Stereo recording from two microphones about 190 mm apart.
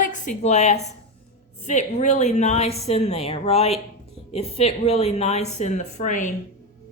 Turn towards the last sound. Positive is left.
turn(degrees=40)  # may be behind; listen again after turning